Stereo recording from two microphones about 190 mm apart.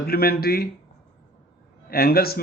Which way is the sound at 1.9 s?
55° left (ahead or behind).